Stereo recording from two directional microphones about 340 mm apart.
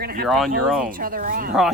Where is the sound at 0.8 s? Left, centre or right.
Right.